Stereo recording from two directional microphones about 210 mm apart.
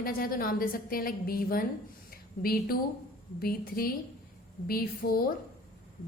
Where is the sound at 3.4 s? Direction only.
45° left (ahead or behind).